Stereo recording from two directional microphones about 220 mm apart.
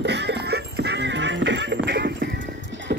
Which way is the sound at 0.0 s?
50° right (ahead or behind).